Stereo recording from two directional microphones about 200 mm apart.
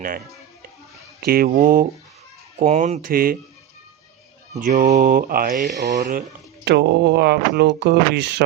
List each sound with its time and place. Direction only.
1.2 s speech: 50° right (ahead or behind)
4.6 s speech: 40° right (ahead or behind)
6.0 s speech: 45° right (ahead or behind)
6.7 s speech: 55° right (ahead or behind)